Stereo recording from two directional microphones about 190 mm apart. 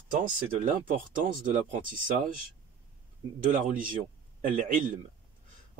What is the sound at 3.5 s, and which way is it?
Speech, 45° right (ahead or behind).